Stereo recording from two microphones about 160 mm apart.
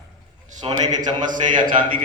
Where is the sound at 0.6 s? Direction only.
25° right (ahead or behind).